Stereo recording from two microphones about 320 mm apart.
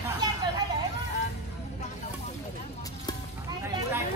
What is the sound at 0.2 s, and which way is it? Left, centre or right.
Vehicle, centre.